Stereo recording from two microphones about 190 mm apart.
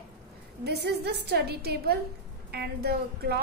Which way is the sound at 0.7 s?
60° right (ahead or behind).